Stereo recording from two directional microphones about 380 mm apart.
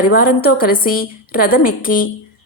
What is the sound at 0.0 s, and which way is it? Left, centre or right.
A woman's voice, left.